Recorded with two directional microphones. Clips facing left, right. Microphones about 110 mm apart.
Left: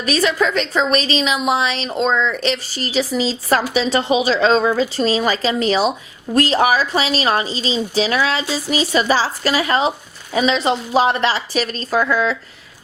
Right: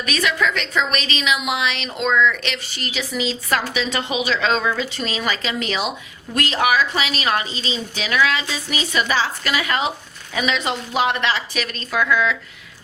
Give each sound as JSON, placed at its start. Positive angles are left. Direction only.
{"t": 0.0, "sound": "a woman's voice", "side_deg": 35}